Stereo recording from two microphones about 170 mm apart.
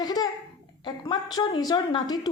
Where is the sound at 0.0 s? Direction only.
25° left (ahead or behind).